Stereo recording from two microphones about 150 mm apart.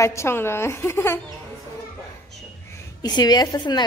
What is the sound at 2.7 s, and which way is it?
A woman's voice, 25° left (ahead or behind).